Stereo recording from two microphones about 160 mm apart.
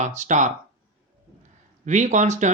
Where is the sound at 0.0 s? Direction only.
50° right (ahead or behind).